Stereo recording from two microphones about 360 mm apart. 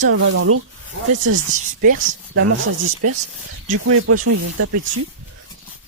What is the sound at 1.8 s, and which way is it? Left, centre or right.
Speech, right.